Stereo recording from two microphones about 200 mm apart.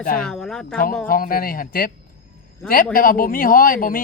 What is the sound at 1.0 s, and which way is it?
A man's voice, 45° left (ahead or behind).